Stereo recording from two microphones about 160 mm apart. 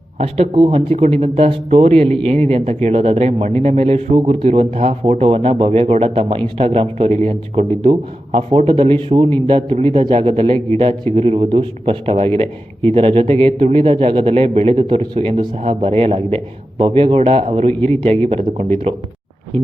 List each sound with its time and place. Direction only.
0.2 s speech: 35° right (ahead or behind)